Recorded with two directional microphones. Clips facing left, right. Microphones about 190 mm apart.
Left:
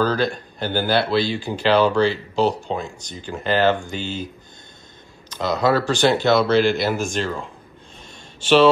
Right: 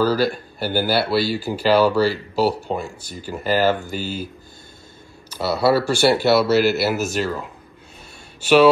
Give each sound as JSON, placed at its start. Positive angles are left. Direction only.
{"t": 0.0, "sound": "speech", "side_deg": -5}
{"t": 5.3, "sound": "speech", "side_deg": -10}